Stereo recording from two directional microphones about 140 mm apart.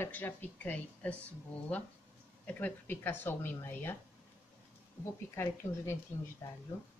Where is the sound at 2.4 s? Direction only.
10° left (ahead or behind).